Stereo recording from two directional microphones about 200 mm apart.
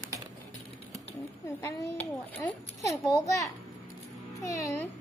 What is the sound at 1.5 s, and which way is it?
A child's voice, 10° left (ahead or behind).